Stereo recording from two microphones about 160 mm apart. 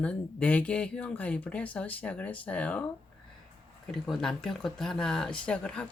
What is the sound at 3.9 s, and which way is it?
Speech, centre (ahead or behind).